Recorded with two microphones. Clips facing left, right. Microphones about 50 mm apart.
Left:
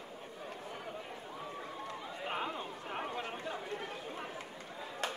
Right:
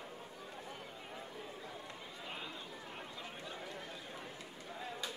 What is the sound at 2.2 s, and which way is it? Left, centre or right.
Chatter, left.